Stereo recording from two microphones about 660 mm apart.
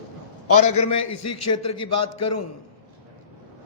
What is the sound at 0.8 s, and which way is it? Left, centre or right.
A man's voice, left.